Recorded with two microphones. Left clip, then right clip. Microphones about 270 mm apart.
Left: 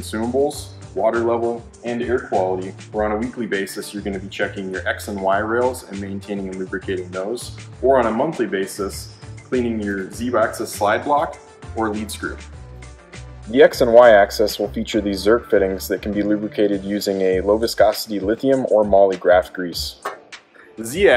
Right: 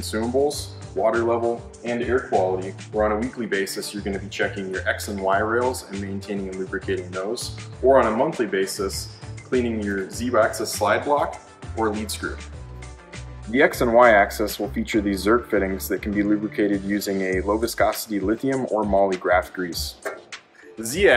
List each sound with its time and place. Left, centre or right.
0.0 s speech: centre
13.6 s speech: left
20.8 s speech: centre